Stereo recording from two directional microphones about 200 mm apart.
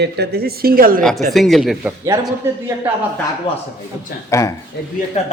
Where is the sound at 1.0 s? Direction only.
Centre (ahead or behind).